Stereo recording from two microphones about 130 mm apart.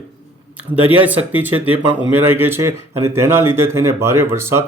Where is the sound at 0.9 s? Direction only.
15° right (ahead or behind).